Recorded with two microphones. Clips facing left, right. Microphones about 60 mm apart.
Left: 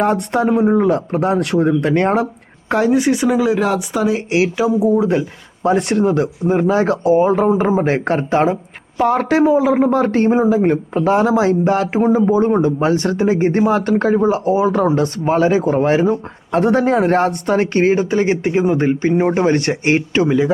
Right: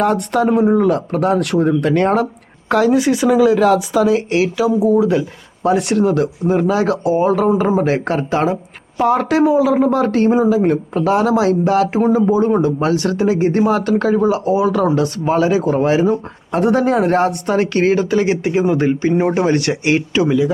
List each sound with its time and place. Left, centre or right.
0.0 s speech: left
0.4 s speech: centre
0.7 s speech: left
2.6 s speech: centre
4.8 s speech: left
5.6 s speech: left
6.0 s speech: left
7.5 s speech: left
11.9 s speech: left